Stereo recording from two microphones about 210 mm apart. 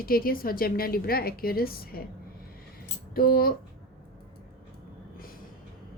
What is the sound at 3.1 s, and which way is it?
Speech, 45° left (ahead or behind).